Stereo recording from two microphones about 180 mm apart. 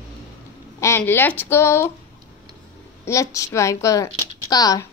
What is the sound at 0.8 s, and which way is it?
A woman's voice, 15° left (ahead or behind).